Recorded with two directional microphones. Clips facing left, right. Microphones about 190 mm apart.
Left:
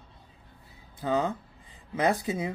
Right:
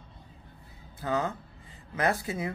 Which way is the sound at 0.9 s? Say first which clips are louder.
Left 3 dB; 15° left (ahead or behind).